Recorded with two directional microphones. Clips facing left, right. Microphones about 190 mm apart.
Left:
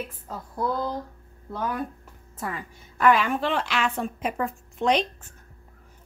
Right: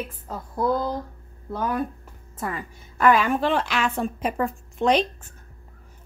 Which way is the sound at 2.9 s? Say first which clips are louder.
Right 2 dB; 45° right (ahead or behind).